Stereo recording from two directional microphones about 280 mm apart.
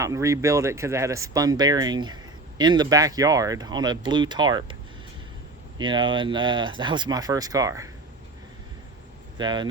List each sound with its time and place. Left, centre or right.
0.0 s speech: centre
9.4 s speech: centre